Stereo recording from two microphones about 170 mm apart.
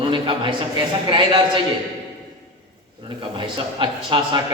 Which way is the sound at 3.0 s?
30° right (ahead or behind).